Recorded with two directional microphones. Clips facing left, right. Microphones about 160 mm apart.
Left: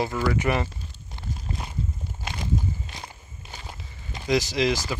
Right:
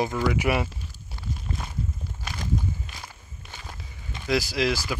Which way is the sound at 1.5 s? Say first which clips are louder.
Left 1 dB; 20° left (ahead or behind).